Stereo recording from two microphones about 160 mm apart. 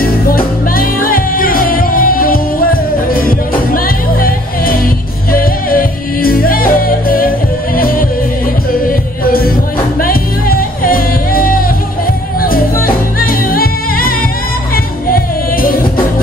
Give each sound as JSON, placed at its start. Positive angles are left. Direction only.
{"t": 0.0, "sound": "music", "side_deg": 65}